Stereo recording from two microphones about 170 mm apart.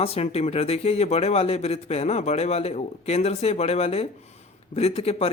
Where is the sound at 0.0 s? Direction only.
35° left (ahead or behind).